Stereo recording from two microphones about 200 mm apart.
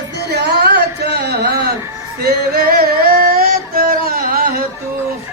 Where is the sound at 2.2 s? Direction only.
50° right (ahead or behind).